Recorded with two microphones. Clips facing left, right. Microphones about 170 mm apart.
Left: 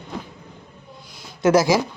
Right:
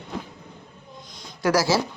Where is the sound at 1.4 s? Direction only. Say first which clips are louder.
Left 5 dB; 20° left (ahead or behind).